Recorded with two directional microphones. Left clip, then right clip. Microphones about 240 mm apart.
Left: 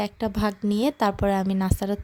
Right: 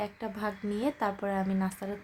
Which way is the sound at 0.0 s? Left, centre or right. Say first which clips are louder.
Left 8 dB; left.